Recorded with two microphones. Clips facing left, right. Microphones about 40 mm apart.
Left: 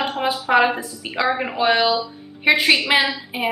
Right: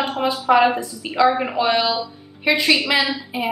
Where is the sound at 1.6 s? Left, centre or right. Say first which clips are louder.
Left 5 dB; centre.